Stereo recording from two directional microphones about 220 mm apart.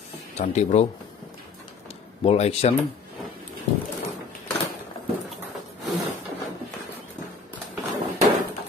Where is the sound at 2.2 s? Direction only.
25° left (ahead or behind).